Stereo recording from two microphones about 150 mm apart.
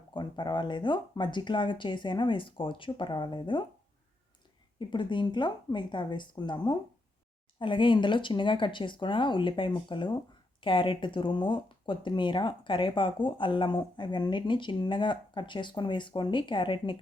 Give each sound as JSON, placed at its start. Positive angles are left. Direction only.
{"t": 0.1, "sound": "speech", "side_deg": 30}
{"t": 4.8, "sound": "speech", "side_deg": 30}